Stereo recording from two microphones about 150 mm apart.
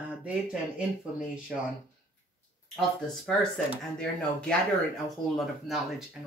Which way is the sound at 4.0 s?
5° left (ahead or behind).